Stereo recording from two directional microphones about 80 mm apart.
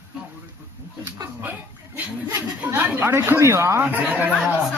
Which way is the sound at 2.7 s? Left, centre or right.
Right.